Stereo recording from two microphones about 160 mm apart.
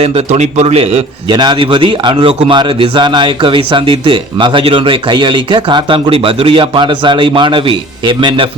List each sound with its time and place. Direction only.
0.0 s a man's voice: 40° right (ahead or behind)